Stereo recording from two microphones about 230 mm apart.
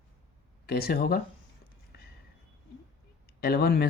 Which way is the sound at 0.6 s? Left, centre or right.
Left.